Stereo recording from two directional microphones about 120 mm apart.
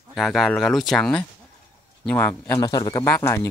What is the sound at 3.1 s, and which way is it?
Speech, 20° left (ahead or behind).